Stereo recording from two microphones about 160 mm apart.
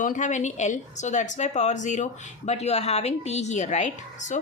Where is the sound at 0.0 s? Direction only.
50° left (ahead or behind).